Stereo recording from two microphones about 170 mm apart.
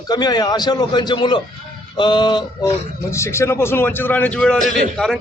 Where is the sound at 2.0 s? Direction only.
25° left (ahead or behind).